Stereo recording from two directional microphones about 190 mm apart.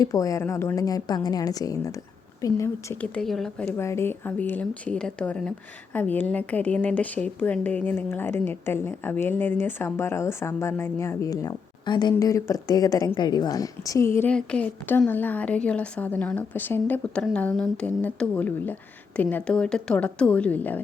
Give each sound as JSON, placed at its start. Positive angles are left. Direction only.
{"t": 0.0, "sound": "a woman's voice", "side_deg": 20}
{"t": 3.8, "sound": "speech", "side_deg": 15}